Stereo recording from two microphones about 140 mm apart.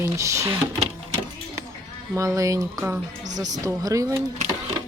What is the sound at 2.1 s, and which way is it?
A woman's voice, 25° right (ahead or behind).